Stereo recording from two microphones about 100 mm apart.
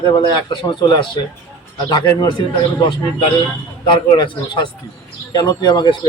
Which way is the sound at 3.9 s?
50° left (ahead or behind).